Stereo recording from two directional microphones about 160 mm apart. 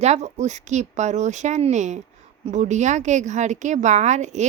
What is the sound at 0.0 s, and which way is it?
Speech, 45° right (ahead or behind).